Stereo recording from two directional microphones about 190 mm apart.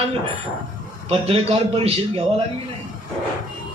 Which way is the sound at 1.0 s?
30° right (ahead or behind).